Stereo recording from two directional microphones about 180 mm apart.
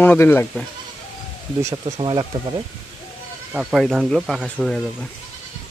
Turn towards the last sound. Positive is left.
turn(degrees=5)  # may be behind; listen again after turning